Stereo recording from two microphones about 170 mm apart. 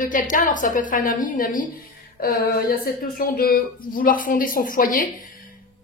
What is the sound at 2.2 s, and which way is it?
Speech, 65° left (ahead or behind).